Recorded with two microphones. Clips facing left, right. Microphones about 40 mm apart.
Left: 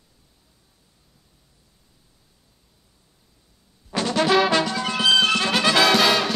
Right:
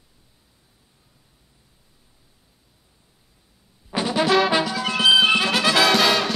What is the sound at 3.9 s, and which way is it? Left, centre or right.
Brass instrument, centre.